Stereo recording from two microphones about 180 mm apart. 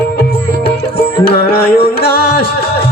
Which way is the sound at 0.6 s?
65° left (ahead or behind).